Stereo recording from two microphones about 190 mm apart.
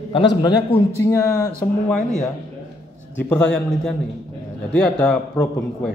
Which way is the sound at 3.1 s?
5° left (ahead or behind).